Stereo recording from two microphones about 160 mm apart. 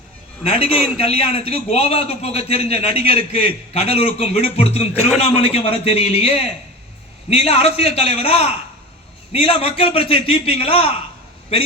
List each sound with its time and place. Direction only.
0.4 s a man's voice: 40° left (ahead or behind)